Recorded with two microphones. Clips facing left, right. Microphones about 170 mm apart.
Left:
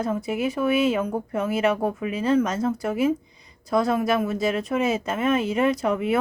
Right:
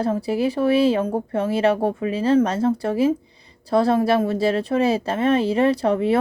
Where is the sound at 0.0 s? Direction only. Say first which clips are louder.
Right 4 dB; 35° right (ahead or behind).